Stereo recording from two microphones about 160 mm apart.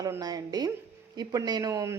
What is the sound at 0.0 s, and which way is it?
A woman's voice, 20° right (ahead or behind).